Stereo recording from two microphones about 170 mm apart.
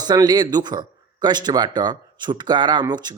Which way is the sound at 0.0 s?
25° right (ahead or behind).